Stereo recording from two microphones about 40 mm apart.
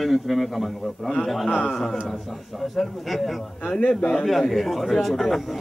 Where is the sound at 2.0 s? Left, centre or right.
Centre.